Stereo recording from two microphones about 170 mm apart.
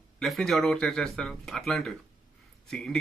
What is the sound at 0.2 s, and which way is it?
Speech, centre (ahead or behind).